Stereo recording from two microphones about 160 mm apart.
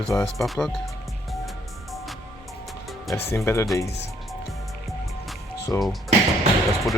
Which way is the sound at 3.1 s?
15° left (ahead or behind).